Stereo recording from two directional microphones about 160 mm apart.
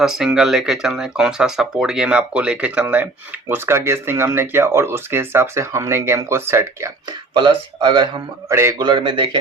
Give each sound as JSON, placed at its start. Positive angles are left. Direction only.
{"t": 0.0, "sound": "speech", "side_deg": -5}
{"t": 7.3, "sound": "speech", "side_deg": -30}